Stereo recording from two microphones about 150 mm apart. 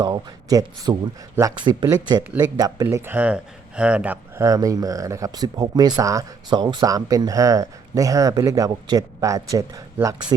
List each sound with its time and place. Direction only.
0.0 s speech: 25° right (ahead or behind)
2.9 s speech: 15° right (ahead or behind)
4.4 s speech: 25° right (ahead or behind)